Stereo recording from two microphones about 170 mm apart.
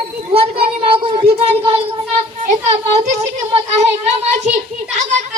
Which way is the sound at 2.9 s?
40° right (ahead or behind).